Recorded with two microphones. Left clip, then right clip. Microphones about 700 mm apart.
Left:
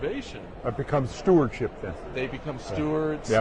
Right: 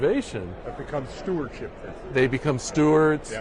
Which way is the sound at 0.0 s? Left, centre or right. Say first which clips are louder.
Right 8 dB; right.